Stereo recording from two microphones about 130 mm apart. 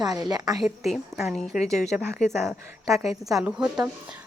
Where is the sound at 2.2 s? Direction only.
5° left (ahead or behind).